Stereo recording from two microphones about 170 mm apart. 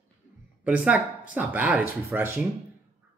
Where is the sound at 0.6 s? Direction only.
10° right (ahead or behind).